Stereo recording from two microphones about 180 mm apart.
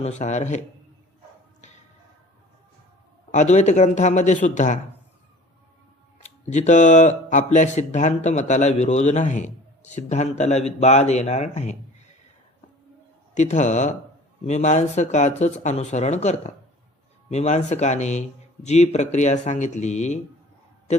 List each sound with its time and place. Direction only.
0.0 s speech: 40° left (ahead or behind)
3.3 s speech: 40° left (ahead or behind)
6.1 s speech: 40° left (ahead or behind)
13.3 s speech: 40° left (ahead or behind)